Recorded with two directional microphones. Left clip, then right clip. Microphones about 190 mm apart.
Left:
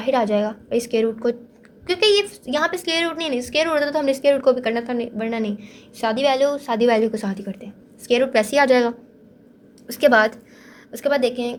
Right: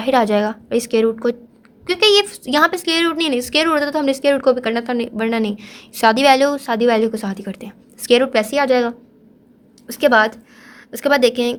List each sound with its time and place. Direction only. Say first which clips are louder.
0.0 s a woman's voice: right 4 dB; 20° right (ahead or behind)
2.3 s a woman's voice: right 6 dB; 25° right (ahead or behind)
8.3 s speech: even; 5° right (ahead or behind)
9.8 s a sound: right 2 dB; 15° right (ahead or behind)
11.0 s speech: right 5 dB; 35° right (ahead or behind)